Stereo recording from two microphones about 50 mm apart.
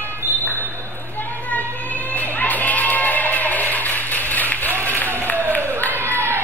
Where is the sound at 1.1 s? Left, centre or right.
Left.